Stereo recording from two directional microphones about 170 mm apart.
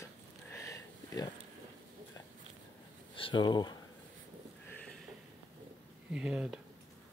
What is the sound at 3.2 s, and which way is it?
Speech, 25° left (ahead or behind).